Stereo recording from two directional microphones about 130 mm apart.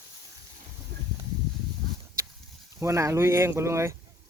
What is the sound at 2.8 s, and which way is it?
Speech, 20° right (ahead or behind).